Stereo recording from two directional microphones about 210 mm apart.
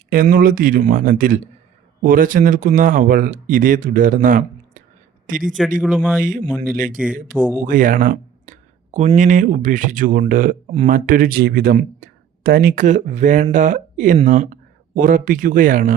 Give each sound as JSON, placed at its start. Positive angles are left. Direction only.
{"t": 0.1, "sound": "a man's voice", "side_deg": -40}
{"t": 5.8, "sound": "a man's voice", "side_deg": -5}
{"t": 6.2, "sound": "speech", "side_deg": -40}
{"t": 7.3, "sound": "speech", "side_deg": -10}
{"t": 7.6, "sound": "speech", "side_deg": -40}